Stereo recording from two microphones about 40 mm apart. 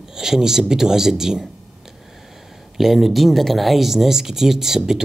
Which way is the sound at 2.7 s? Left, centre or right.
Centre.